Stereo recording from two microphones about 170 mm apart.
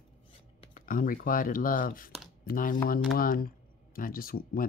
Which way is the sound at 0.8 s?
55° left (ahead or behind).